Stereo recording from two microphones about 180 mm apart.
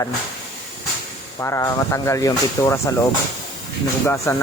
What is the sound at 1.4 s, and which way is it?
Speech, 15° left (ahead or behind).